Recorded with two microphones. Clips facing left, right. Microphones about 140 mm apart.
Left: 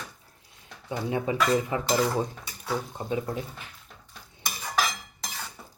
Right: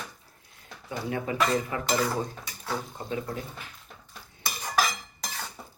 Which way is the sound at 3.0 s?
20° left (ahead or behind).